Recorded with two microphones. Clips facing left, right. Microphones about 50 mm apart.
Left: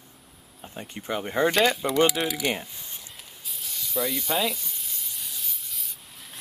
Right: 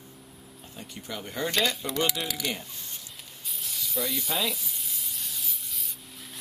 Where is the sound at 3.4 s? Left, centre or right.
Centre.